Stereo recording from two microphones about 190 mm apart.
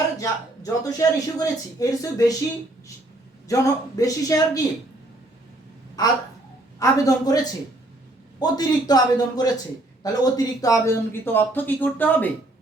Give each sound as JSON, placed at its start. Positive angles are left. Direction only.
{"t": 0.2, "sound": "a man's voice", "side_deg": 20}
{"t": 3.5, "sound": "speech", "side_deg": 20}
{"t": 6.0, "sound": "a man's voice", "side_deg": 20}